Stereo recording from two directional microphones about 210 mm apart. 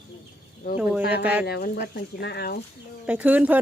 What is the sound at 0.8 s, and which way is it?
Speech, 5° right (ahead or behind).